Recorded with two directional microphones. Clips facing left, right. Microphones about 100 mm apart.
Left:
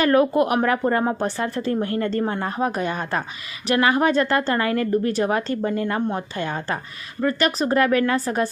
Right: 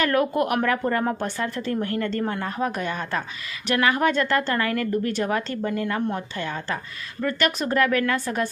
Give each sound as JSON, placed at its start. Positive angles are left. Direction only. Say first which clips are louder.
{"t": 0.0, "sound": "speech", "louder": "left 4 dB", "side_deg": 35}
{"t": 1.7, "sound": "a woman's voice", "louder": "left 2 dB", "side_deg": 30}
{"t": 4.5, "sound": "speech", "louder": "left 3 dB", "side_deg": 30}